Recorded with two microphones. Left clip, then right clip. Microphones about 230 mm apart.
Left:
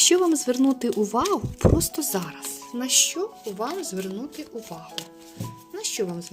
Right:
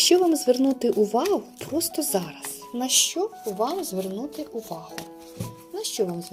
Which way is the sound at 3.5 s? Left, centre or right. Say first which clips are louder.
Right 6 dB; left.